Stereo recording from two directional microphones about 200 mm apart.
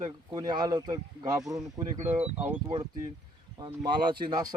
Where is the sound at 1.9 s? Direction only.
35° right (ahead or behind).